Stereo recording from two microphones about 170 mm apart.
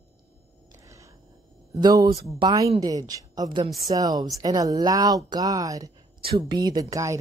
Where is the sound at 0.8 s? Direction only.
20° right (ahead or behind).